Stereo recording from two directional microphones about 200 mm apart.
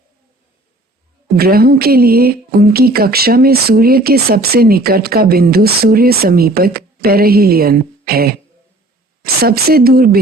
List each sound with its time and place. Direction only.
1.4 s speech: 50° right (ahead or behind)